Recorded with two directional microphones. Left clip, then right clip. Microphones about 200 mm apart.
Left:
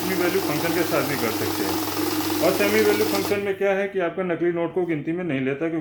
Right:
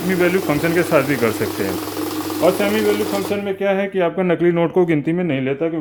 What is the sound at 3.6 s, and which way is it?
Speech, 30° right (ahead or behind).